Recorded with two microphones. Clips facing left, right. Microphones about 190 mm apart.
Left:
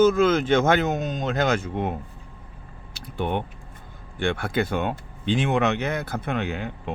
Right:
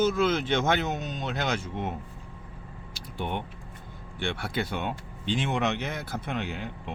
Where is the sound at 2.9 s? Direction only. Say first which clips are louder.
Left 6 dB; 55° left (ahead or behind).